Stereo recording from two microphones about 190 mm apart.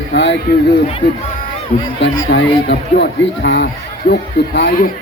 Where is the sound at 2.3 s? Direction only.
65° left (ahead or behind).